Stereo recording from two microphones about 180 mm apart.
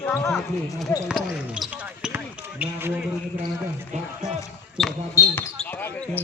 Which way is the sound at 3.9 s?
40° right (ahead or behind).